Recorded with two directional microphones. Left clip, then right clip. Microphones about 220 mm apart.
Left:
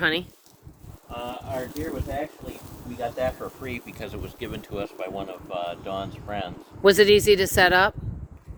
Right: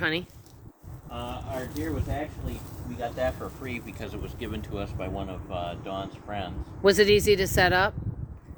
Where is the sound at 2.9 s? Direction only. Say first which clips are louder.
Left 2 dB; 10° left (ahead or behind).